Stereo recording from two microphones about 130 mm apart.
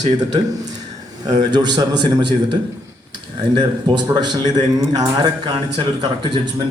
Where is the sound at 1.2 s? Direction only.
35° right (ahead or behind).